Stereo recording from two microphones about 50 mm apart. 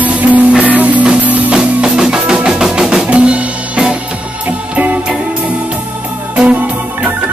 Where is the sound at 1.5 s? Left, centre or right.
Centre.